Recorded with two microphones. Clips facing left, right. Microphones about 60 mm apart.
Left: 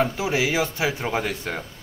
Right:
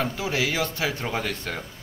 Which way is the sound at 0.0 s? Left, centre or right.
Centre.